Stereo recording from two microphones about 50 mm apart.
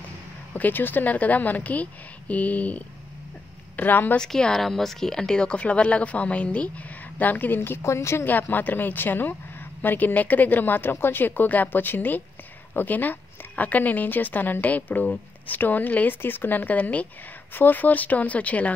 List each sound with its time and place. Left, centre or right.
0.6 s speech: left
3.7 s speech: left
4.2 s speech: centre
7.2 s speech: left
7.8 s a woman's voice: left
8.3 s speech: left